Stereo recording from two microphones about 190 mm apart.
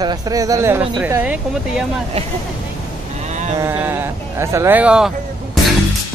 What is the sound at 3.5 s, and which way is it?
Speech, 10° right (ahead or behind).